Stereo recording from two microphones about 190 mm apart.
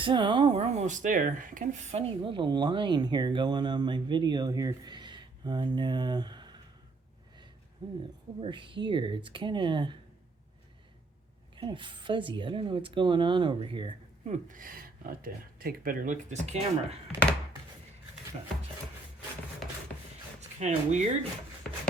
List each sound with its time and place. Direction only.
0.0 s speech: 25° right (ahead or behind)
7.8 s speech: 25° right (ahead or behind)
11.5 s speech: 25° right (ahead or behind)
20.6 s speech: 35° right (ahead or behind)